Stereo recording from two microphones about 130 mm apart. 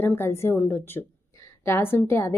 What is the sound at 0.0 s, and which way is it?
A woman's voice, 15° left (ahead or behind).